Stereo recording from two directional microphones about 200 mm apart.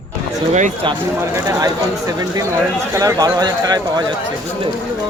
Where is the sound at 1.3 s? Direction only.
15° right (ahead or behind).